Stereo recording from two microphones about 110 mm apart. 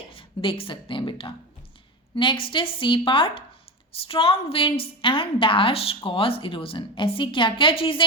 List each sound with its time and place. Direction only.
0.1 s a woman's voice: 55° left (ahead or behind)